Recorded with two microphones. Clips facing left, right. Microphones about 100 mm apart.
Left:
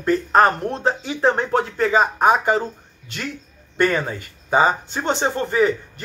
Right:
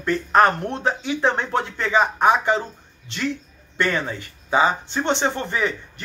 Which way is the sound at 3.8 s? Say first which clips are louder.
Left 3 dB; 45° left (ahead or behind).